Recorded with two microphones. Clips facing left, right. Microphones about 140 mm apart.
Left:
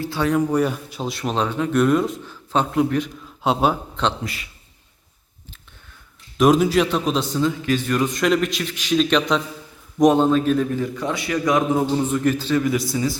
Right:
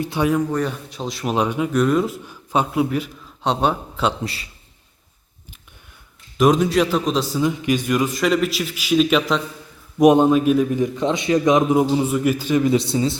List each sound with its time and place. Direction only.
0.0 s speech: 20° right (ahead or behind)
0.3 s a man's voice: 5° left (ahead or behind); by 1.7 s 10° right (ahead or behind)
1.7 s a man's voice: centre (ahead or behind)
2.2 s a man's voice: 10° right (ahead or behind)
3.4 s a man's voice: 5° left (ahead or behind)
4.2 s a man's voice: 30° right (ahead or behind)
6.3 s a man's voice: centre (ahead or behind)
7.4 s a man's voice: 15° right (ahead or behind)
10.0 s a man's voice: 15° right (ahead or behind)